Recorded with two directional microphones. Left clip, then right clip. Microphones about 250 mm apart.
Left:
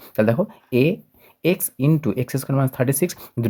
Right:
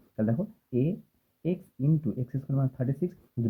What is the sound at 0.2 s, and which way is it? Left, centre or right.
Speech, left.